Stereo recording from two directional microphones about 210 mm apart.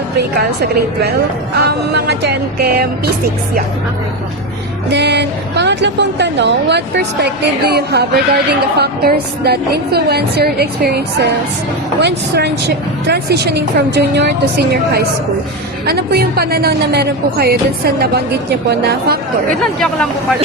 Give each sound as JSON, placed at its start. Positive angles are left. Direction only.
{"t": 0.3, "sound": "a woman's voice", "side_deg": -50}
{"t": 4.9, "sound": "a woman's voice", "side_deg": -55}